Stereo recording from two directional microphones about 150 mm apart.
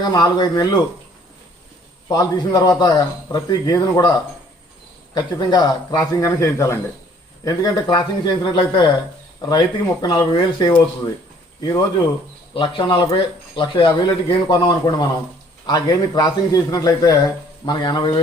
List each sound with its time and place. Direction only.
0.0 s a man's voice: 30° left (ahead or behind)
2.0 s a man's voice: 25° left (ahead or behind)
12.5 s a man's voice: 35° left (ahead or behind)